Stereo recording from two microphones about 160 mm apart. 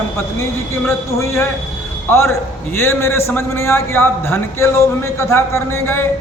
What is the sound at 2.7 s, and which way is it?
A man's voice, 15° left (ahead or behind).